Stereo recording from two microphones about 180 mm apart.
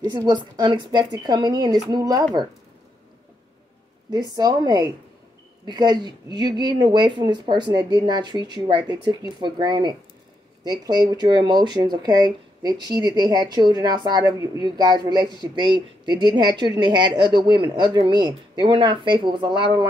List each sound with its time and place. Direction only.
0.0 s speech: 20° right (ahead or behind)
4.4 s speech: 20° right (ahead or behind)